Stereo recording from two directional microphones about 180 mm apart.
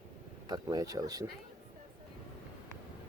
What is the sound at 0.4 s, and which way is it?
Speech, 20° right (ahead or behind).